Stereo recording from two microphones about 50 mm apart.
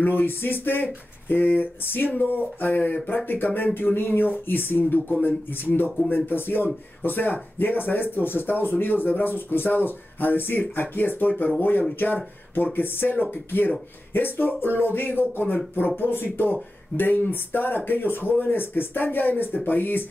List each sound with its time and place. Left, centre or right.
0.0 s speech: left
12.5 s speech: left